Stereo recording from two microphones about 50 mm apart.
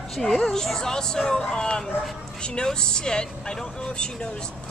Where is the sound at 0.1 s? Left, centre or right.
Centre.